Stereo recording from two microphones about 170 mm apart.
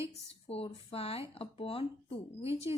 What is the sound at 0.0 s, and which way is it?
Speech, 35° left (ahead or behind).